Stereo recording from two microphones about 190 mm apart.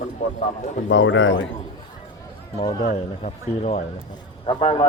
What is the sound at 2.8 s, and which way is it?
A man's voice, 35° left (ahead or behind).